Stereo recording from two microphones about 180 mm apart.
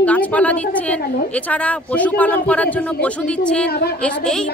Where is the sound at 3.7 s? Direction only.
60° left (ahead or behind).